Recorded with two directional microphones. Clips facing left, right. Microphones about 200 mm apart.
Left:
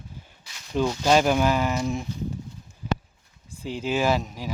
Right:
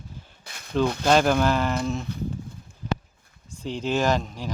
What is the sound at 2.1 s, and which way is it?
Speech, 60° right (ahead or behind).